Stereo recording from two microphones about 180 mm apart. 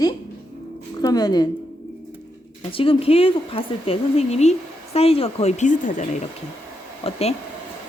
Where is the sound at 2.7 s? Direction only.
30° left (ahead or behind).